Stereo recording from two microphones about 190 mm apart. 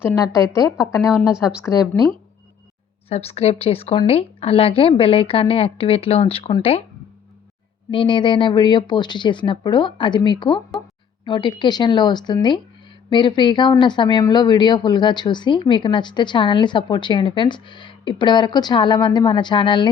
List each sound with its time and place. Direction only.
0.0 s a woman's voice: 15° left (ahead or behind)
3.1 s a woman's voice: 30° left (ahead or behind)
7.9 s speech: 25° left (ahead or behind)